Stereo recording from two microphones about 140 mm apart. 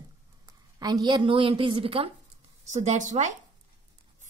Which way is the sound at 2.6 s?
55° right (ahead or behind).